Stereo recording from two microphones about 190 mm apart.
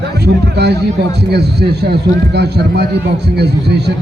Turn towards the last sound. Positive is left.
turn(degrees=-60)  # may be behind; listen again after turning